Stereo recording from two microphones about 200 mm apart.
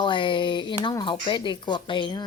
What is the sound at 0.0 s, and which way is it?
Speech, 25° left (ahead or behind).